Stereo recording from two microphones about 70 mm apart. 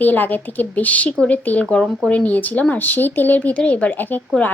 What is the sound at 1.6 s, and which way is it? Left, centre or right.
Speech, centre.